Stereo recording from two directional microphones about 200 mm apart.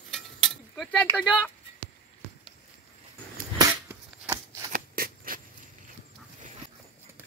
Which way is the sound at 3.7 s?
15° right (ahead or behind).